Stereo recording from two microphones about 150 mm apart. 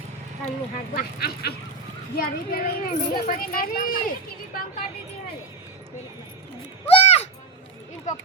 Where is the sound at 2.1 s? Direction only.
80° left.